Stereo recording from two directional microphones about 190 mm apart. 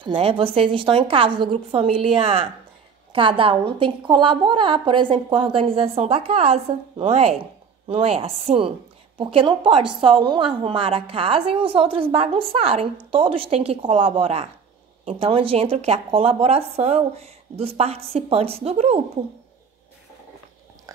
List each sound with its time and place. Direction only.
0.0 s a woman's voice: 30° right (ahead or behind)